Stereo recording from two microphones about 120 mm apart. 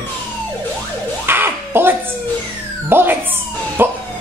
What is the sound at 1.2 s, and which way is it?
Music, 15° right (ahead or behind).